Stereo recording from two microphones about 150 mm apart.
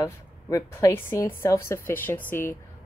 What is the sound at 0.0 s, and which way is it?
A woman's voice, 20° left (ahead or behind).